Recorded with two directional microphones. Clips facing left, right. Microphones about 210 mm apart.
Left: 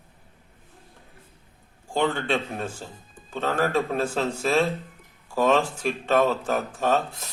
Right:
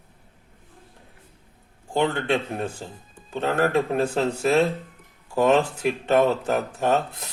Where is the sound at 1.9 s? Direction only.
20° right (ahead or behind).